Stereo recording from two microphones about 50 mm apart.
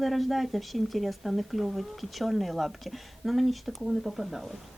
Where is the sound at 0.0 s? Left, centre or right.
Centre.